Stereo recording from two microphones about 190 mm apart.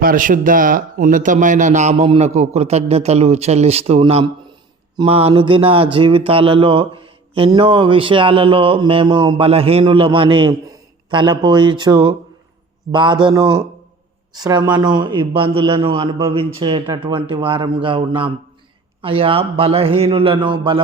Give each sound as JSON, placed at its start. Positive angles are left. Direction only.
{"t": 0.0, "sound": "speech", "side_deg": -45}